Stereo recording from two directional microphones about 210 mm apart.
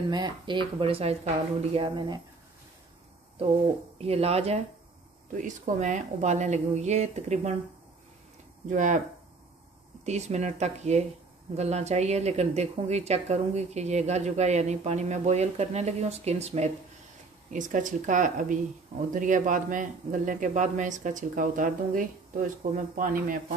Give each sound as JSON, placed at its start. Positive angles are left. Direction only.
{"t": 0.1, "sound": "speech", "side_deg": -20}
{"t": 4.0, "sound": "speech", "side_deg": -30}
{"t": 8.6, "sound": "speech", "side_deg": -35}
{"t": 10.0, "sound": "speech", "side_deg": -30}